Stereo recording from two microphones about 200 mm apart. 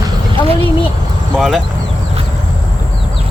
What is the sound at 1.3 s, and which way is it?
Speech, centre (ahead or behind).